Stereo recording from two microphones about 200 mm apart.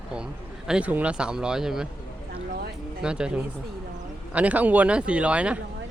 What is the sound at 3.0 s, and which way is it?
Speech, 5° right (ahead or behind).